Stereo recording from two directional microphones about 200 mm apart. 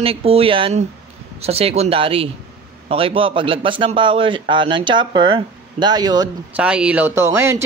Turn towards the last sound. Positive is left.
turn(degrees=-10)  # may be behind; listen again after turning